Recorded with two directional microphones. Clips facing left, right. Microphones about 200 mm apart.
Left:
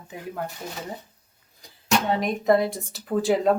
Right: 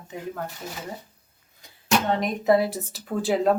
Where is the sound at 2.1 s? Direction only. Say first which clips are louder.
Even; centre (ahead or behind).